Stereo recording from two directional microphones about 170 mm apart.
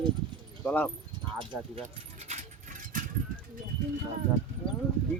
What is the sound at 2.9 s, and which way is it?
Bird, 50° right (ahead or behind).